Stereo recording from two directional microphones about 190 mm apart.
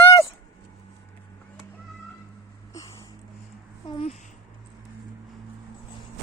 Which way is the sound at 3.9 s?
30° left (ahead or behind).